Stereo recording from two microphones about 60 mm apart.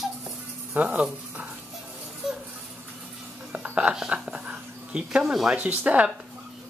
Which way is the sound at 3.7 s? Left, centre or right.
Centre.